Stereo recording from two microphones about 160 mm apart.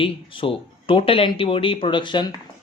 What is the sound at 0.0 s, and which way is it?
Speech, 35° left (ahead or behind).